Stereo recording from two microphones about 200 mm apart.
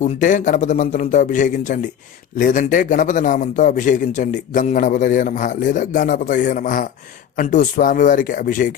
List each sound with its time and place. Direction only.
0.0 s a man's voice: 40° left (ahead or behind)